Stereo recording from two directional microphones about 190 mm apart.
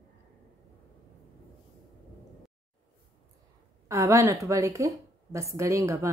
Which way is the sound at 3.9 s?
15° right (ahead or behind).